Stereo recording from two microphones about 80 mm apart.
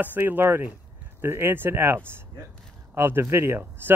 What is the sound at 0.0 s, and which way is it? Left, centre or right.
Speech, right.